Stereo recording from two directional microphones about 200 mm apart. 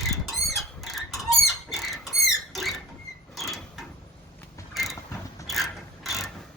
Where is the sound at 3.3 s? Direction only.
Centre (ahead or behind).